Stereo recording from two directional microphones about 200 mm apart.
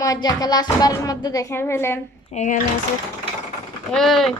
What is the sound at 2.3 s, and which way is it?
Speech, 35° left (ahead or behind).